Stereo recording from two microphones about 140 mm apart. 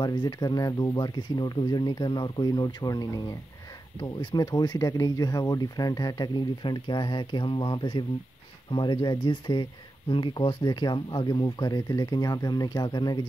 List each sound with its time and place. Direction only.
0.0 s speech: 30° left (ahead or behind)